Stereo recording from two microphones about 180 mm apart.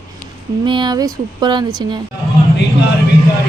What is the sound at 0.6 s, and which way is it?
Speech, 25° right (ahead or behind).